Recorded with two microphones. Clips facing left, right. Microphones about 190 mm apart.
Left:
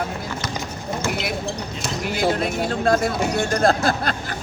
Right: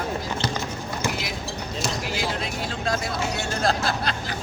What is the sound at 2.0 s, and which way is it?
Speech, 50° left (ahead or behind).